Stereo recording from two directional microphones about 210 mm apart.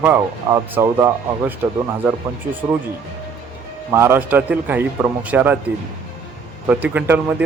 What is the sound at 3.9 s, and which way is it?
Speech, 10° right (ahead or behind).